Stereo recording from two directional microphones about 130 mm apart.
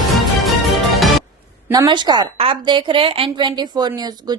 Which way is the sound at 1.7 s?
35° right (ahead or behind).